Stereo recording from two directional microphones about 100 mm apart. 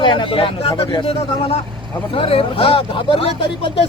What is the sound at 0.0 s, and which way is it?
Speech, 55° left (ahead or behind).